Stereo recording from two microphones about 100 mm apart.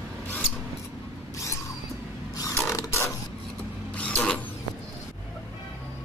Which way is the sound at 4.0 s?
10° left (ahead or behind).